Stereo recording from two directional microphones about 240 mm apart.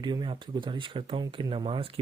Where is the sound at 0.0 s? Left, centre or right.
Centre.